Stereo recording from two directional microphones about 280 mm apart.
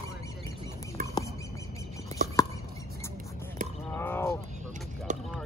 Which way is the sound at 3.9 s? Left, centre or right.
Centre.